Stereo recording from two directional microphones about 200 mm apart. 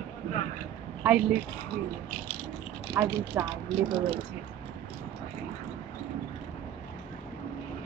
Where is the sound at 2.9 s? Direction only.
15° right (ahead or behind).